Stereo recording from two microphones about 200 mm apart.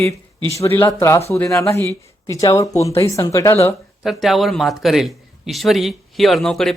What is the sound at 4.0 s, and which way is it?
Speech, centre (ahead or behind).